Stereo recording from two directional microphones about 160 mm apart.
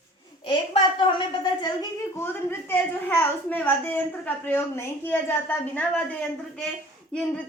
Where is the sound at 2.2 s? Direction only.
15° left (ahead or behind).